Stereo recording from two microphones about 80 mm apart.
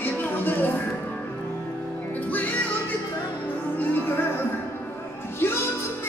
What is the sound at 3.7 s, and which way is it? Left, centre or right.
Music, left.